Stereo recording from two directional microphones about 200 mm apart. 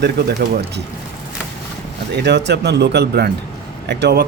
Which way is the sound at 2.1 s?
55° right (ahead or behind).